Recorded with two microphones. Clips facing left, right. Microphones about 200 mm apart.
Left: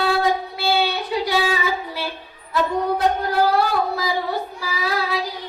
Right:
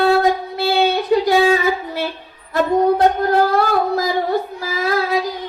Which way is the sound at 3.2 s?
45° right (ahead or behind).